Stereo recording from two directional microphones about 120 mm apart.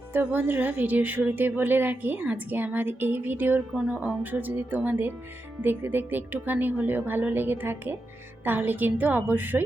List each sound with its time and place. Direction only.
0.1 s a woman's voice: 15° right (ahead or behind)